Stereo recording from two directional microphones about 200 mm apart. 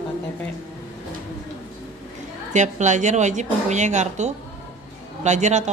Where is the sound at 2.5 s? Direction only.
35° right (ahead or behind).